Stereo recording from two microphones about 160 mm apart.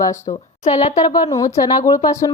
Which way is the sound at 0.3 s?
45° left (ahead or behind).